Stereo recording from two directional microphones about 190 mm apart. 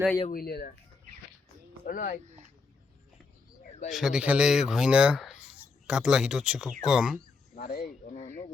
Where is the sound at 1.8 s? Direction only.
50° left (ahead or behind).